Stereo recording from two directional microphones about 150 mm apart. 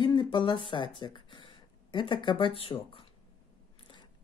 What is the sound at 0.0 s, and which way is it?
Speech, 30° left (ahead or behind).